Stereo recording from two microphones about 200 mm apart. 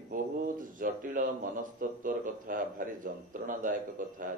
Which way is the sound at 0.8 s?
40° right (ahead or behind).